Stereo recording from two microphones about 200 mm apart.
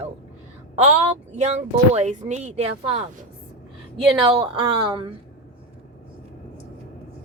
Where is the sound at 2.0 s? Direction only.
35° right (ahead or behind).